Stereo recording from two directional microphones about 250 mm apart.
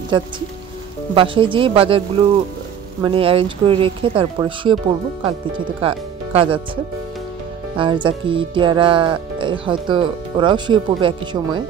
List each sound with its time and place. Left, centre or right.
1.1 s speech: centre
5.8 s speech: right
7.7 s speech: centre